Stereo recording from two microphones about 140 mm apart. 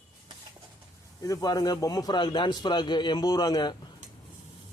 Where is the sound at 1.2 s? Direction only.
25° left (ahead or behind).